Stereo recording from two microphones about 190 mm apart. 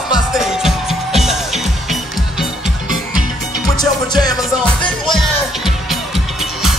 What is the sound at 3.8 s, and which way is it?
Music, 20° left (ahead or behind).